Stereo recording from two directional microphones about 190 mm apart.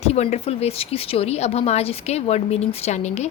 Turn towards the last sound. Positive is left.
turn(degrees=35)  # may be behind; listen again after turning